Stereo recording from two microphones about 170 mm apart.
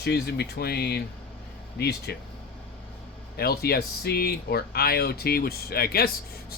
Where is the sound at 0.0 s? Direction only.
70° left (ahead or behind).